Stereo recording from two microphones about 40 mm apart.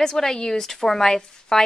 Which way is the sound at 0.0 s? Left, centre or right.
Centre.